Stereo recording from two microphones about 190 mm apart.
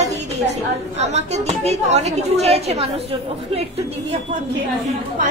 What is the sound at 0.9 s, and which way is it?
Speech, 35° right (ahead or behind).